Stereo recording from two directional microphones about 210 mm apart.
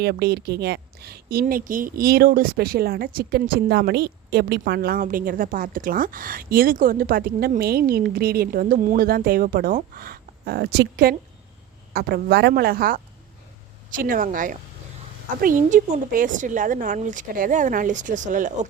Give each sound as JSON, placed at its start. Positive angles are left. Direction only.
{"t": 0.0, "sound": "a woman's voice", "side_deg": -50}